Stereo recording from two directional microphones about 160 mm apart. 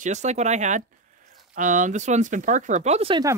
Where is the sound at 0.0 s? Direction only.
45° right (ahead or behind).